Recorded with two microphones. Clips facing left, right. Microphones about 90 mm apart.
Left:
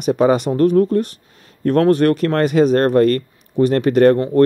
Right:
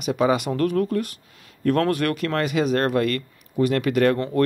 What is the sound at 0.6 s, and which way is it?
A man's voice, 30° left (ahead or behind).